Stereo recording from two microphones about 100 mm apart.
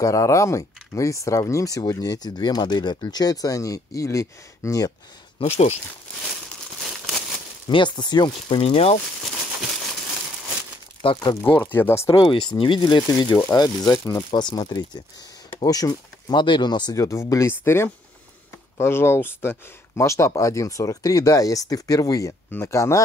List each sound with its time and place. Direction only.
0.0 s speech: 35° left (ahead or behind)
5.4 s speech: 60° left (ahead or behind)
6.8 s crumpling: centre (ahead or behind)
7.6 s speech: 50° left (ahead or behind); by 8.9 s 75° left (ahead or behind)
11.0 s speech: 55° left (ahead or behind)
11.6 s speech: 20° left (ahead or behind)
12.1 s speech: 55° left (ahead or behind)
13.5 s speech: 35° left (ahead or behind)
16.9 s speech: 30° left (ahead or behind)
22.5 s speech: 25° left (ahead or behind)